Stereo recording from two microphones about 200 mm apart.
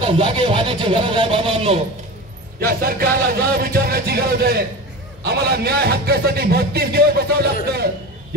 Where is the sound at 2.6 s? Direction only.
50° right (ahead or behind).